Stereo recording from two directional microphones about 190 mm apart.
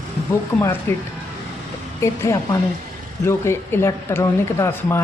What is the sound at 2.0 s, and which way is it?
Speech, 15° left (ahead or behind).